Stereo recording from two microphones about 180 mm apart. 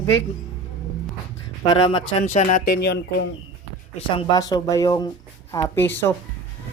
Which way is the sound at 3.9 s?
25° left (ahead or behind).